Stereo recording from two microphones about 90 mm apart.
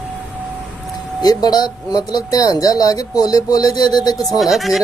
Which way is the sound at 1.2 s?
50° left (ahead or behind).